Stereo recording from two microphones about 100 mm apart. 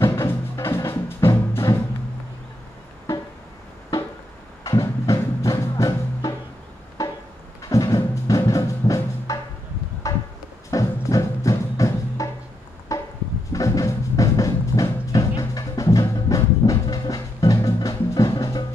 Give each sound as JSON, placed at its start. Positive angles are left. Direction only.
{"t": 0.0, "sound": "music", "side_deg": 25}
{"t": 4.6, "sound": "music", "side_deg": 30}
{"t": 7.0, "sound": "a sound", "side_deg": 30}
{"t": 7.7, "sound": "music", "side_deg": 30}
{"t": 12.9, "sound": "a sound", "side_deg": 35}
{"t": 13.5, "sound": "music", "side_deg": 35}